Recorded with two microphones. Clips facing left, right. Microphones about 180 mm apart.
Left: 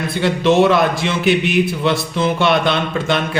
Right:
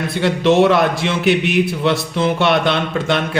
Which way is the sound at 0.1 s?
65° right (ahead or behind).